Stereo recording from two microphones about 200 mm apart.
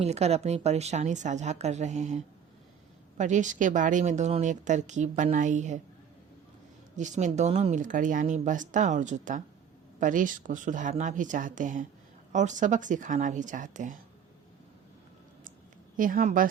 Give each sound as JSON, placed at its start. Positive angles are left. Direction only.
{"t": 0.0, "sound": "speech", "side_deg": -30}
{"t": 6.9, "sound": "speech", "side_deg": -35}
{"t": 16.0, "sound": "speech", "side_deg": -40}